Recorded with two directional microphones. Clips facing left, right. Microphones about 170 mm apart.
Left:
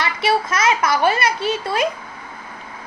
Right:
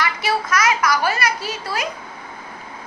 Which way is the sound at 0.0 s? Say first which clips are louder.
Left 3 dB; 25° left (ahead or behind).